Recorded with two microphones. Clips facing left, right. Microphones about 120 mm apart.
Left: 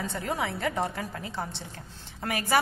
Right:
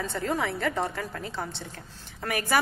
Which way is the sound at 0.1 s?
20° left (ahead or behind).